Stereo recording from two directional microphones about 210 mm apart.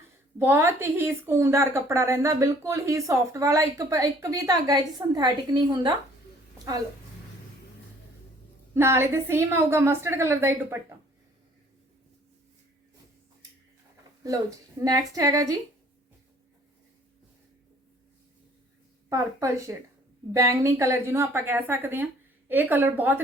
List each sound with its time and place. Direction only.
0.3 s a woman's voice: 10° right (ahead or behind)
8.7 s a woman's voice: 10° right (ahead or behind)
14.8 s a woman's voice: 15° right (ahead or behind)
19.0 s a woman's voice: 15° right (ahead or behind)